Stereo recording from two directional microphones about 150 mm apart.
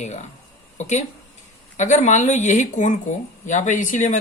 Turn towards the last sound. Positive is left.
turn(degrees=55)  # may be behind; listen again after turning